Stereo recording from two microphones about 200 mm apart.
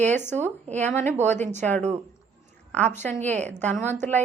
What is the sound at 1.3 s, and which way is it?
Speech, 35° right (ahead or behind).